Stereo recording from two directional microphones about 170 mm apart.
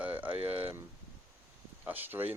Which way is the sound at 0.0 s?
10° right (ahead or behind).